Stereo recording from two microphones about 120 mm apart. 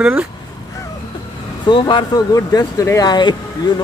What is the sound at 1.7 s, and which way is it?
Speech, 40° left (ahead or behind).